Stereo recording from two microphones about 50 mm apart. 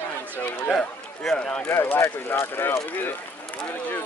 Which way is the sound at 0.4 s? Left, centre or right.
Left.